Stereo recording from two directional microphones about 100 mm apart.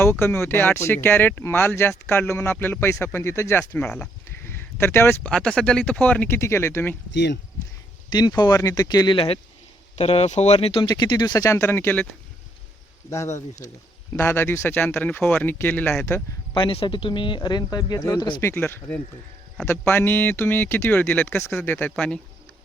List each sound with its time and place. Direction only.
0.0 s speech: 25° left (ahead or behind)
3.8 s speech: 10° left (ahead or behind)
4.4 s a sound: 25° left (ahead or behind)
5.3 s speech: 10° left (ahead or behind); by 6.9 s 25° left (ahead or behind)
8.1 s speech: 45° left (ahead or behind); by 9.4 s 65° left (ahead or behind)
9.9 s speech: 90° left
10.8 s speech: 45° left (ahead or behind)
11.5 s speech: 25° left (ahead or behind)
13.1 s speech: 30° left (ahead or behind)
16.6 s speech: 55° left (ahead or behind); by 18.4 s 40° left (ahead or behind)
18.4 s speech: 25° left (ahead or behind)